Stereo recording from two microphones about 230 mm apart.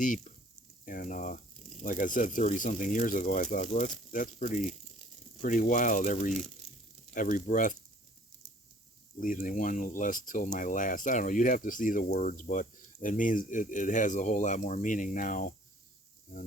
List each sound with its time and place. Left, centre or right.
0.0 s speech: left
9.1 s speech: left